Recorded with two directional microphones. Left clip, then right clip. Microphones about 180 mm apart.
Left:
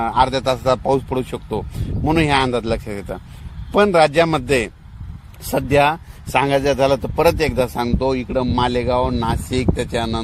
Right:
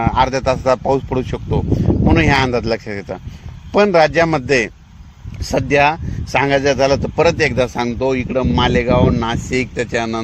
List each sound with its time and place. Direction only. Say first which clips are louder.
0.0 s speech: right 1 dB; 20° right (ahead or behind)